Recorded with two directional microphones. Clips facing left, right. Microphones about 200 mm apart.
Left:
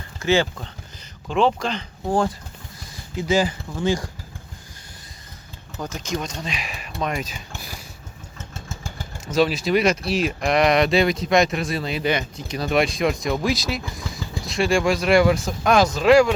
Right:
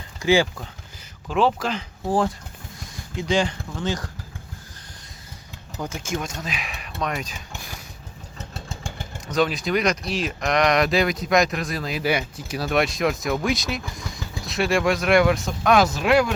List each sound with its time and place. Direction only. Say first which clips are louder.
0.2 s speech: right 1 dB; 15° right (ahead or behind); by 4.1 s 10° left (ahead or behind)
5.7 s speech: left 1 dB; 10° right (ahead or behind)
8.4 s vehicle: right 1 dB; 35° right (ahead or behind)
9.3 s speech: left 3 dB; 5° left (ahead or behind)